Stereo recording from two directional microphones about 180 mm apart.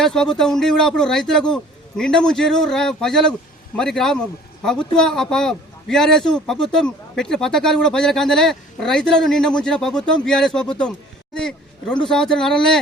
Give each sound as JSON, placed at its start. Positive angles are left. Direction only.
{"t": 0.0, "sound": "speech", "side_deg": 5}